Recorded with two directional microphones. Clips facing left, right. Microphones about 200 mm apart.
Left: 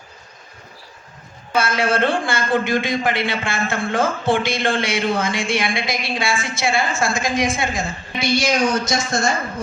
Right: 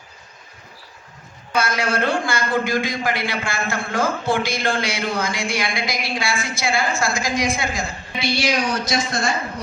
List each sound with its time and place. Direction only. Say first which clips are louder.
1.5 s a man's voice: left 2 dB; 25° left (ahead or behind)
8.4 s speech: left 3 dB; 45° left (ahead or behind)